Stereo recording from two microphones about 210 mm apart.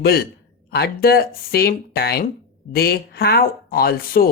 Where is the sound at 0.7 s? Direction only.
50° left (ahead or behind).